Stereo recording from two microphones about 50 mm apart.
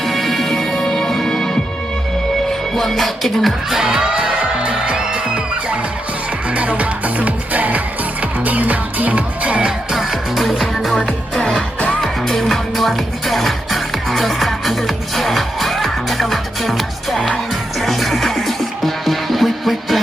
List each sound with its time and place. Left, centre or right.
0.0 s music: centre; by 9.7 s right
9.9 s music: centre
11.0 s music: centre
12.0 s music: centre